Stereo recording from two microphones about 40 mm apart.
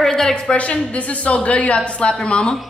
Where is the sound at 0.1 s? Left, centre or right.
Centre.